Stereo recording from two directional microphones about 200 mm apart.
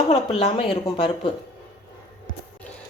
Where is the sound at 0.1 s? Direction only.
35° left (ahead or behind).